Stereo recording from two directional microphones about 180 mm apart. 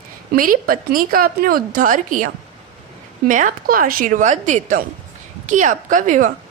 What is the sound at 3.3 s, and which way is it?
A woman's voice, 45° right (ahead or behind).